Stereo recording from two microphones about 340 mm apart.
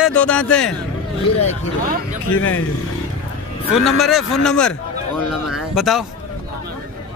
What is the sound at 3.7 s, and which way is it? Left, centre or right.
Speech, centre.